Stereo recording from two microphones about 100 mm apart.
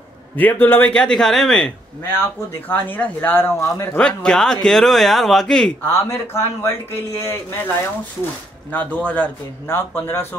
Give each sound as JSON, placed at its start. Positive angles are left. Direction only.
{"t": 0.4, "sound": "a man's voice", "side_deg": 20}
{"t": 2.7, "sound": "a man's voice", "side_deg": 20}
{"t": 3.9, "sound": "speech", "side_deg": 10}
{"t": 5.9, "sound": "speech", "side_deg": 25}
{"t": 8.7, "sound": "a man's voice", "side_deg": 15}